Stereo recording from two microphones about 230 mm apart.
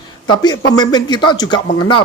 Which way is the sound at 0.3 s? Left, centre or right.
Centre.